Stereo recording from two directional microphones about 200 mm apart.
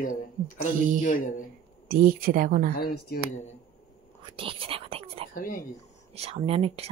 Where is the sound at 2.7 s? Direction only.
50° left (ahead or behind).